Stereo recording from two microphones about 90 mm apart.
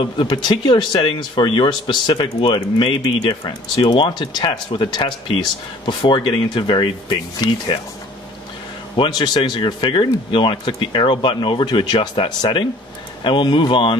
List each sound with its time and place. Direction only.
0.0 s speech: 65° left (ahead or behind)
0.9 s speech: 70° left (ahead or behind); by 7.5 s 55° left (ahead or behind)
8.9 s speech: 65° left (ahead or behind)